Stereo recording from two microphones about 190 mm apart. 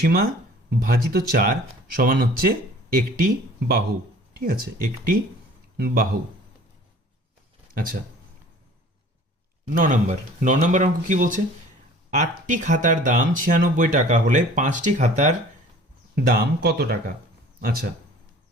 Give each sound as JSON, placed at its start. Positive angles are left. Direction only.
{"t": 0.0, "sound": "speech", "side_deg": -55}
{"t": 9.7, "sound": "speech", "side_deg": -45}
{"t": 16.1, "sound": "speech", "side_deg": -55}